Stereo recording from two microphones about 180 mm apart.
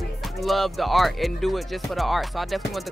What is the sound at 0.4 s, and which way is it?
Speech, centre (ahead or behind).